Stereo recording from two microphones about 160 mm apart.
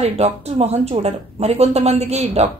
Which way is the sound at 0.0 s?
40° right (ahead or behind).